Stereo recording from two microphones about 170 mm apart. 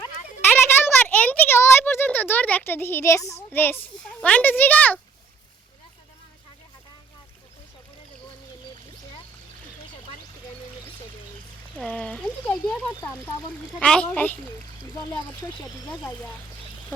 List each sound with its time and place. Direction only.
0.5 s a sound: 10° left (ahead or behind)
3.5 s speech: 10° left (ahead or behind)
11.8 s speech: 5° left (ahead or behind)
14.9 s speech: 25° left (ahead or behind)